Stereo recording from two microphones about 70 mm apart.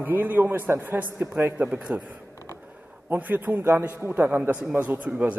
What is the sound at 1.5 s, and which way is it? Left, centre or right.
A man's voice, centre.